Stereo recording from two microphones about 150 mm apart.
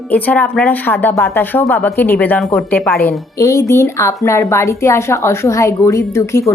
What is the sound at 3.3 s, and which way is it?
A woman's voice, 20° left (ahead or behind).